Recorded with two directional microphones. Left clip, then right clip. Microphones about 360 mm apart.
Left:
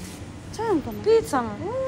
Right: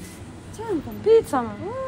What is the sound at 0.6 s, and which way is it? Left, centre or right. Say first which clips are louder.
Speech: left 4 dB; left.